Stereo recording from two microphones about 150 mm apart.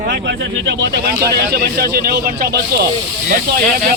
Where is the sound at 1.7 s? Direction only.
90° right.